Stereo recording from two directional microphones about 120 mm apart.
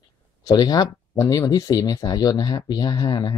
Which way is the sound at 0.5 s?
35° left (ahead or behind).